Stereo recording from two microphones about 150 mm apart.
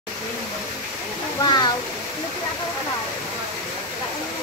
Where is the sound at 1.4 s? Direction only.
30° left (ahead or behind).